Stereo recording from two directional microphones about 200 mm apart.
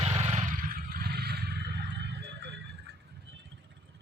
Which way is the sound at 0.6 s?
50° right (ahead or behind).